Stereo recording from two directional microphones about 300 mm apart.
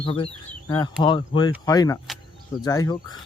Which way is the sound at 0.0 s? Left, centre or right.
Centre.